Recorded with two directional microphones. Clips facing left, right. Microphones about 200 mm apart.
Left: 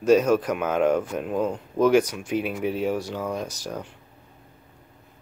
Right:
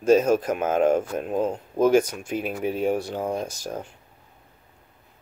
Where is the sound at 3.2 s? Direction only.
30° right (ahead or behind).